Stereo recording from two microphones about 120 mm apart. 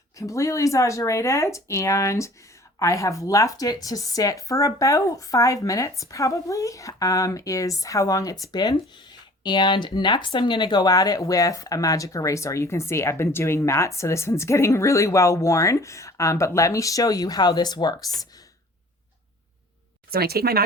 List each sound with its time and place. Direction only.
0.2 s speech: 25° left (ahead or behind)